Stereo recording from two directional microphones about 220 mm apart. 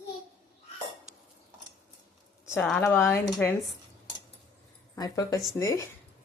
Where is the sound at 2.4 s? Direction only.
10° left (ahead or behind).